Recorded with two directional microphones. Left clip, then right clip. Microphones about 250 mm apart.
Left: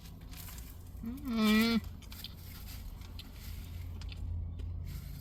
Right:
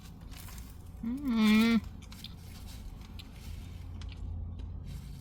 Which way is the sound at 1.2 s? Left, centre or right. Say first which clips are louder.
Right 2 dB; centre.